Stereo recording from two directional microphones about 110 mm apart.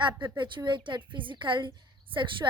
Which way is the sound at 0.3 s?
45° right (ahead or behind).